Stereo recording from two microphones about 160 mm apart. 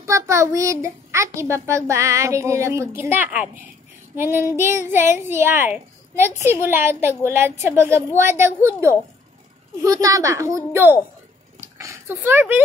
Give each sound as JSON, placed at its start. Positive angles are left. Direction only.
{"t": 0.0, "sound": "a woman's voice", "side_deg": -20}
{"t": 4.1, "sound": "child singing", "side_deg": -15}
{"t": 4.6, "sound": "a woman's voice", "side_deg": -15}
{"t": 11.6, "sound": "a sound", "side_deg": -15}